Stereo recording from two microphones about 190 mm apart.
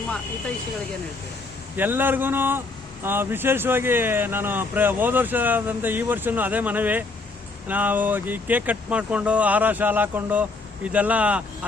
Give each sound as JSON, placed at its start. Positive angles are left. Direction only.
{"t": 1.7, "sound": "speech", "side_deg": -10}